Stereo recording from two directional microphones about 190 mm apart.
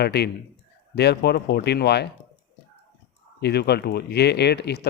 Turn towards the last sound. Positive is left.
turn(degrees=60)  # may be behind; listen again after turning